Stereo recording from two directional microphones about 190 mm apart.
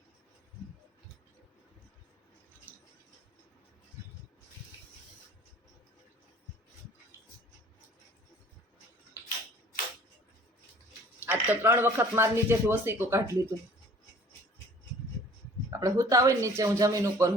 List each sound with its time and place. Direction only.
11.3 s speech: 10° right (ahead or behind)
15.8 s speech: 15° right (ahead or behind)